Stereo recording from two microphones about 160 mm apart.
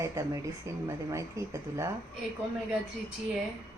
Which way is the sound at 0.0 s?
20° right (ahead or behind).